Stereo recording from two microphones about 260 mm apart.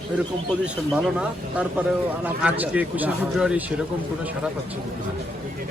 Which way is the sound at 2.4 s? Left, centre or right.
Centre.